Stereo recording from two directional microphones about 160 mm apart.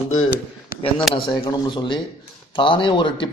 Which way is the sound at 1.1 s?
25° left (ahead or behind).